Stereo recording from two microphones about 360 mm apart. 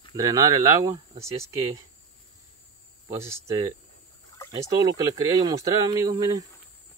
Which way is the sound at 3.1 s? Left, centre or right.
Centre.